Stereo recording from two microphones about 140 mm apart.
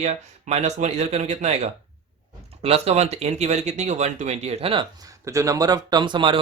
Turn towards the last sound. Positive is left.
turn(degrees=-35)  # may be behind; listen again after turning